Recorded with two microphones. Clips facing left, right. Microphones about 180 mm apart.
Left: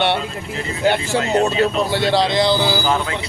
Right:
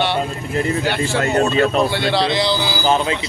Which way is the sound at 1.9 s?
45° left (ahead or behind).